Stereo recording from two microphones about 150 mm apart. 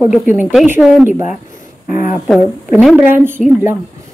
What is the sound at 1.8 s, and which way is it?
Speech, 65° left (ahead or behind).